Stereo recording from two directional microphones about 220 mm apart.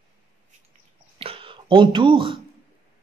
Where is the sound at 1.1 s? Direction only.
25° right (ahead or behind).